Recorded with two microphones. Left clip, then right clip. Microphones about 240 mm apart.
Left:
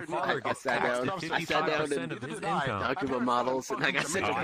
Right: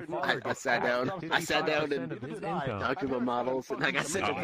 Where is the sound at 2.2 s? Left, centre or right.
Left.